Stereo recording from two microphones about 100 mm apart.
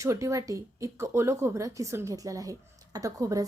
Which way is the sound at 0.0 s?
30° right (ahead or behind).